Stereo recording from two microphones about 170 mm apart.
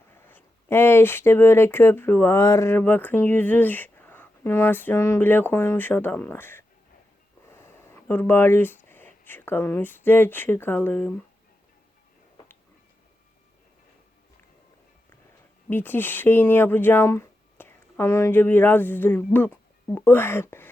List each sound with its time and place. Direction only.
0.1 s speech: 10° left (ahead or behind)
15.7 s speech: 10° left (ahead or behind)